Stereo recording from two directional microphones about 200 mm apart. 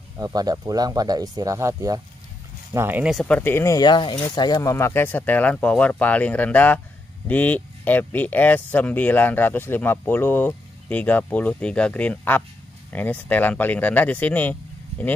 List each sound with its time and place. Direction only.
0.2 s speech: 20° right (ahead or behind); by 15.1 s 10° left (ahead or behind)